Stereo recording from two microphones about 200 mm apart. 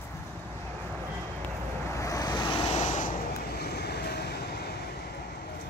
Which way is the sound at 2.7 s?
35° left (ahead or behind).